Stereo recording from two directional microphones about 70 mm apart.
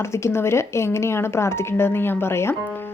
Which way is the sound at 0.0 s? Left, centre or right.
Left.